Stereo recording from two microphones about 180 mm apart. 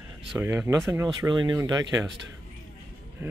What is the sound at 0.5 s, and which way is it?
Speech, 15° right (ahead or behind).